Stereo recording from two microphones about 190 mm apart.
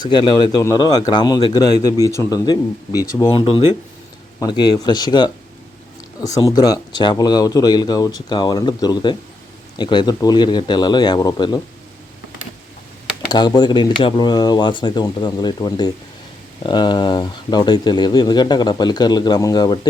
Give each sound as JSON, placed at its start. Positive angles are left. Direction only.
{"t": 0.0, "sound": "speech", "side_deg": 25}
{"t": 13.2, "sound": "speech", "side_deg": 20}